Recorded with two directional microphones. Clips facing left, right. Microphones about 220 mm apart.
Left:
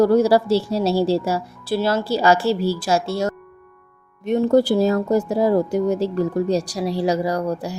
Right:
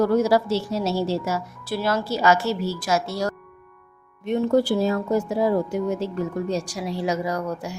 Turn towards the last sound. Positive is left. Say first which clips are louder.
# left 4 dB
turn(degrees=35)  # may be behind; listen again after turning